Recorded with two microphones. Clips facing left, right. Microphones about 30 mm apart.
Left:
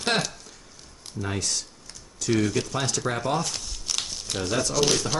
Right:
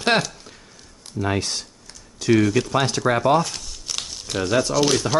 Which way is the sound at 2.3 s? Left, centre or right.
Centre.